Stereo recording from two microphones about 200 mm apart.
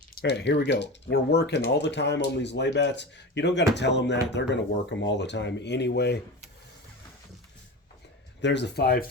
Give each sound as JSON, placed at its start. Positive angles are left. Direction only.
{"t": 0.1, "sound": "speech", "side_deg": 55}
{"t": 8.4, "sound": "speech", "side_deg": 60}